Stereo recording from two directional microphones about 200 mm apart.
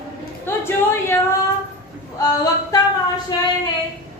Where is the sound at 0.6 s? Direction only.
10° left (ahead or behind).